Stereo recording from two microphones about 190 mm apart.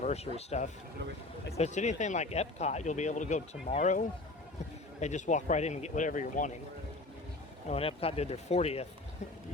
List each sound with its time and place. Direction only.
0.0 s speech: 35° left (ahead or behind)
7.7 s speech: 30° left (ahead or behind)